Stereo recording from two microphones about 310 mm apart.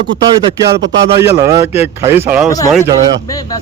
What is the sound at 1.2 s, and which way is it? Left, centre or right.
Speech, centre.